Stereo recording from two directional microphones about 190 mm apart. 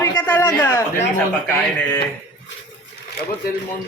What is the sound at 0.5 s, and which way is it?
Speech, 10° left (ahead or behind).